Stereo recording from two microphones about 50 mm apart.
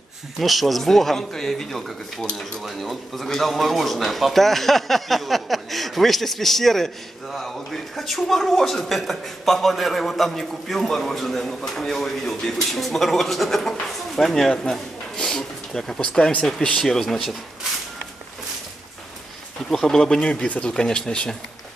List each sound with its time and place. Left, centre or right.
0.4 s a man's voice: centre
2.2 s speech: centre
2.6 s a man's voice: centre
16.2 s speech: left; by 17.4 s centre
19.7 s speech: centre
20.2 s speech: left